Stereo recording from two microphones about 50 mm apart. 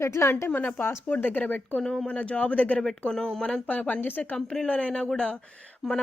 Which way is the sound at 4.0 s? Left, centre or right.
Left.